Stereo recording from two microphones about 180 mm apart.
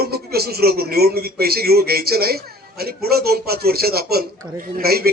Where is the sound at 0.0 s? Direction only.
60° right (ahead or behind).